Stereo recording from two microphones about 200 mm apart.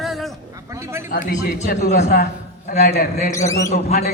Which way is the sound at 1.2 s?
40° left (ahead or behind).